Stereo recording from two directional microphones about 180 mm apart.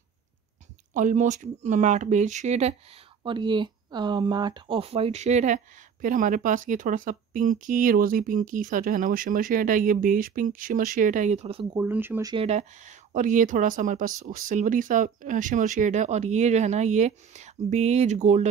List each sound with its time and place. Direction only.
0.9 s speech: 45° right (ahead or behind)
3.3 s speech: 25° right (ahead or behind)
11.7 s speech: 10° right (ahead or behind)
12.3 s speech: 35° right (ahead or behind)